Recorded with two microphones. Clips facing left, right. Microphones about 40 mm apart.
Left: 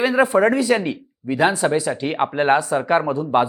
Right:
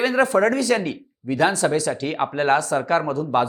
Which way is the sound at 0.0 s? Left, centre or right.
Centre.